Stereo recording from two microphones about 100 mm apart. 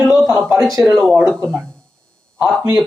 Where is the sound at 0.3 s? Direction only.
30° right (ahead or behind).